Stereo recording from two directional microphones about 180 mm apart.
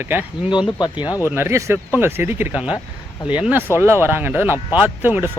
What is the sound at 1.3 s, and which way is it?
Speech, 15° right (ahead or behind).